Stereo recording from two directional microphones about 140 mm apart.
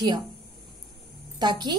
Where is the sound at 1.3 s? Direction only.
30° right (ahead or behind).